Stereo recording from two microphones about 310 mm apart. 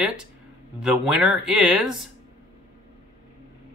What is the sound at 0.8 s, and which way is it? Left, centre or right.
Speech, centre.